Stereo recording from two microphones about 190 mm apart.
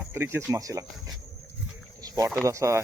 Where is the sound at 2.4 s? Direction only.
15° right (ahead or behind).